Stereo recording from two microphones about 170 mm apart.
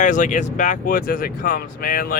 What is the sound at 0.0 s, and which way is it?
Speech, 50° left (ahead or behind).